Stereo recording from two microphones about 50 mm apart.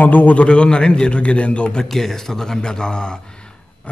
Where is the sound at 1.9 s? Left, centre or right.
Centre.